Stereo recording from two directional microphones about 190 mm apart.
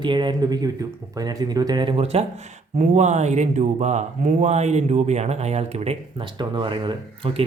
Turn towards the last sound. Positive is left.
turn(degrees=-25)  # may be behind; listen again after turning